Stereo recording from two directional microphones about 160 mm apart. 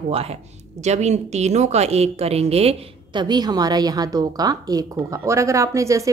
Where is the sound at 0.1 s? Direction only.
40° right (ahead or behind).